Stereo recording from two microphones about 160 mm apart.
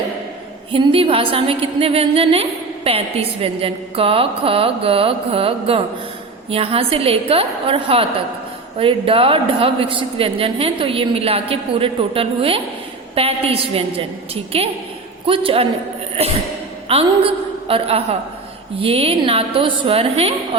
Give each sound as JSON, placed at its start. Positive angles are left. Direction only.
{"t": 0.7, "sound": "a woman's voice", "side_deg": -35}
{"t": 16.9, "sound": "a woman's voice", "side_deg": -35}